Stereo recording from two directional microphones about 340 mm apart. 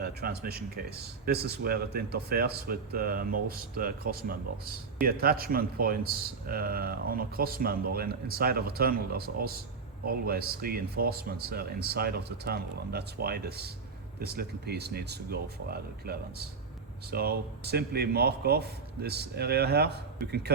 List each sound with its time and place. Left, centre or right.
0.0 s speech: right